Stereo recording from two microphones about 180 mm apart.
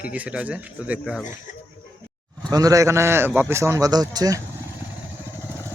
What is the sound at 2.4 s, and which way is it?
A man's voice, 20° right (ahead or behind).